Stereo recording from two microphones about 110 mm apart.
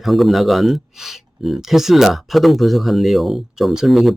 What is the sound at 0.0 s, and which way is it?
A man's voice, centre (ahead or behind).